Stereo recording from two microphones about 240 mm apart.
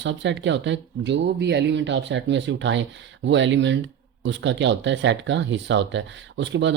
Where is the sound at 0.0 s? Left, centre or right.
Right.